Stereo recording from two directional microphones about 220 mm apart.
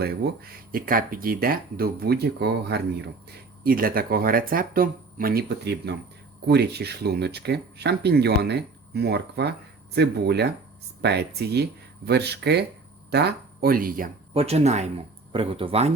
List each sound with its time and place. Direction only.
0.0 s speech: 40° right (ahead or behind)
14.3 s speech: 30° right (ahead or behind)